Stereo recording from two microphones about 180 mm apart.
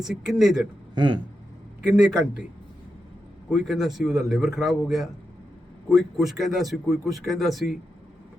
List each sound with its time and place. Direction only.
0.0 s a man's voice: centre (ahead or behind)
0.9 s speech: 25° right (ahead or behind)
1.8 s a man's voice: 5° right (ahead or behind)
3.5 s a man's voice: centre (ahead or behind)